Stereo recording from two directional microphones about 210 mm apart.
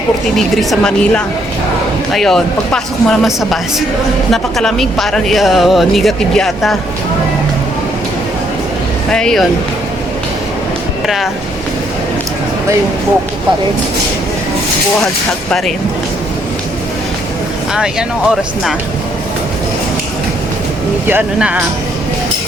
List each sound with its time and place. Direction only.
0.3 s speech: centre (ahead or behind)
9.0 s speech: 5° left (ahead or behind)
11.0 s speech: centre (ahead or behind)
15.0 s speech: 5° left (ahead or behind)
21.1 s speech: 5° right (ahead or behind)